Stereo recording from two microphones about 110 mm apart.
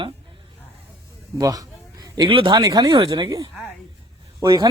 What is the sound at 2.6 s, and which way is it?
Speech, 35° right (ahead or behind).